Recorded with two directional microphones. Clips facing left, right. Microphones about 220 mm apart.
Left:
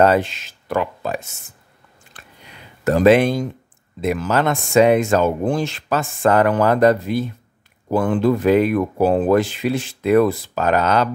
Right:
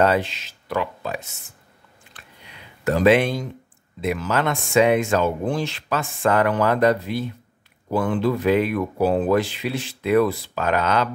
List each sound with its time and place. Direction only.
0.0 s speech: 45° left (ahead or behind)
2.8 s speech: 45° left (ahead or behind)